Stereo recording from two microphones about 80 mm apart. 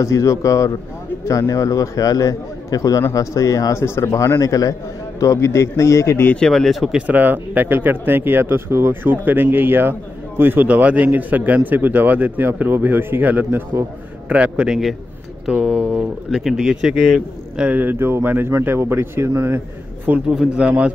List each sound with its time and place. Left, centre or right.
0.0 s a man's voice: left
3.8 s a man's voice: left
6.3 s a man's voice: centre
7.0 s speech: centre
14.3 s a man's voice: centre
16.3 s a man's voice: centre
17.6 s speech: right
20.2 s a man's voice: centre